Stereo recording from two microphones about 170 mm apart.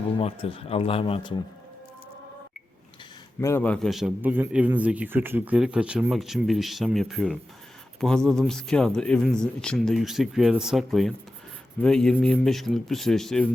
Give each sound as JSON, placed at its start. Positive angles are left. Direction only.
{"t": 0.2, "sound": "speech", "side_deg": 35}
{"t": 3.4, "sound": "a man's voice", "side_deg": 10}